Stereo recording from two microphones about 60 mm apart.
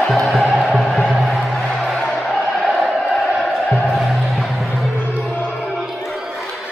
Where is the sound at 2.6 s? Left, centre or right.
Centre.